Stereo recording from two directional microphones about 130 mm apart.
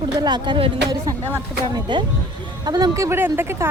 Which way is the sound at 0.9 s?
30° right (ahead or behind).